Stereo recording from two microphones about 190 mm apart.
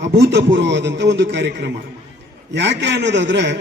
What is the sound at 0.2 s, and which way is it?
A man's voice, 65° right (ahead or behind).